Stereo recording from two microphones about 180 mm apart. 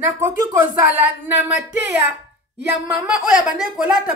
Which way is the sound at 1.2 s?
10° right (ahead or behind).